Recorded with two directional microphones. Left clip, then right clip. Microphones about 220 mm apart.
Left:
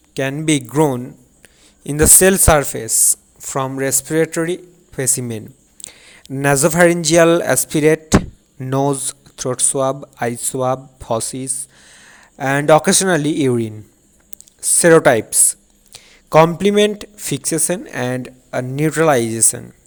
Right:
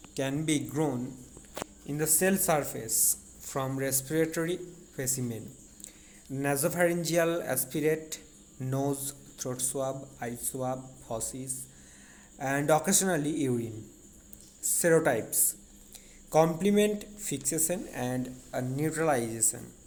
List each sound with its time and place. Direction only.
0.1 s a man's voice: 35° left (ahead or behind)